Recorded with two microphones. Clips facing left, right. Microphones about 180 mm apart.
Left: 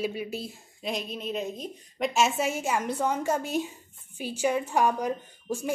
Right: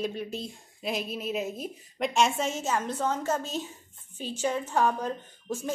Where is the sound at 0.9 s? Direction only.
5° right (ahead or behind).